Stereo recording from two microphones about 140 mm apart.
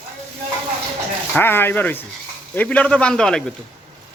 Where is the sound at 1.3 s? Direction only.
15° left (ahead or behind).